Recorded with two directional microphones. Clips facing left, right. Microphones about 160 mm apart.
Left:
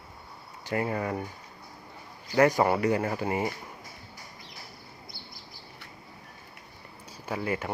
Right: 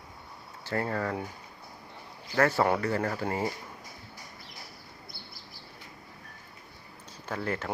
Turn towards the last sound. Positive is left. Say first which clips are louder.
# left 2 dB
turn(degrees=10)  # may be behind; listen again after turning